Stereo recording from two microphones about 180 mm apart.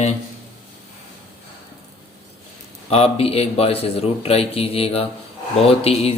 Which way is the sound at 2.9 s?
35° left (ahead or behind).